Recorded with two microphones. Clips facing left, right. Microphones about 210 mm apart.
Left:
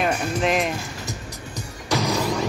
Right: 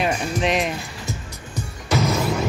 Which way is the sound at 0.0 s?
Centre (ahead or behind).